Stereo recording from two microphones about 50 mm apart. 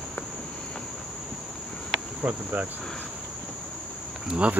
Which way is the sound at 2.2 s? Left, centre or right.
Right.